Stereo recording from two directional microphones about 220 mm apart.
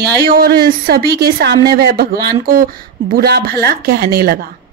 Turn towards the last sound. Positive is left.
turn(degrees=-45)  # may be behind; listen again after turning